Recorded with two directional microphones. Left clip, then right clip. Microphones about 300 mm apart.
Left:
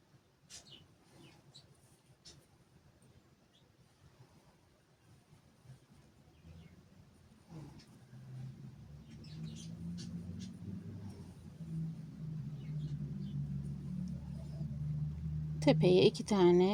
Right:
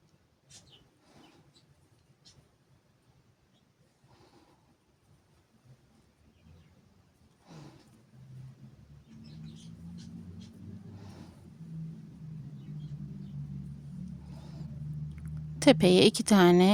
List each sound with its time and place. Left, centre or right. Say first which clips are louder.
15.5 s speech: right 7 dB; right